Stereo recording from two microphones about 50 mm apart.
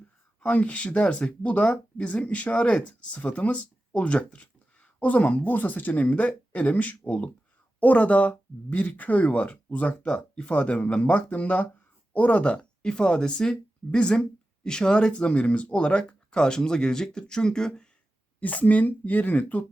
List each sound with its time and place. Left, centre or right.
0.4 s speech: left
1.6 s speech: centre
2.0 s speech: left
18.3 s speech: left